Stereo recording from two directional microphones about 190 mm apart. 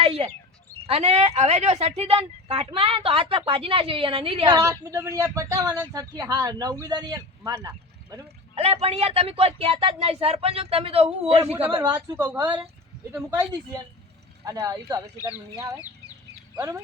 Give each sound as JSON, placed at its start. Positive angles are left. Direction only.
{"t": 0.0, "sound": "bird", "side_deg": -30}
{"t": 0.9, "sound": "speech", "side_deg": -35}
{"t": 8.5, "sound": "speech", "side_deg": -30}
{"t": 11.7, "sound": "speech", "side_deg": -20}
{"t": 14.4, "sound": "speech", "side_deg": -15}